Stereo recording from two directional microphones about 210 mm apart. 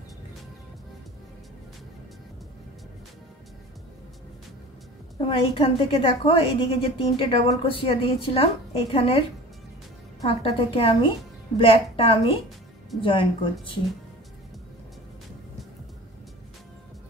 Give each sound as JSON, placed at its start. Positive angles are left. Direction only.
{"t": 5.3, "sound": "a woman's voice", "side_deg": 25}
{"t": 10.2, "sound": "a woman's voice", "side_deg": 25}